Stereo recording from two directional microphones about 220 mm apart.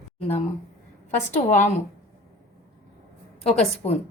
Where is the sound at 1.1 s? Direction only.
35° left (ahead or behind).